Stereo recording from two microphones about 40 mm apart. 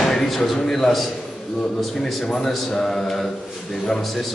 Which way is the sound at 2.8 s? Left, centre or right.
Centre.